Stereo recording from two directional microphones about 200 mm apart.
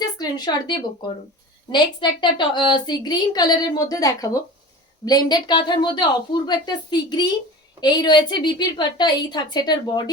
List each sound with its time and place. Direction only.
0.0 s a woman's voice: 20° left (ahead or behind)